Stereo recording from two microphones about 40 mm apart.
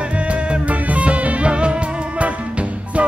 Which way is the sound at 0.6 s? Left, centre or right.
Right.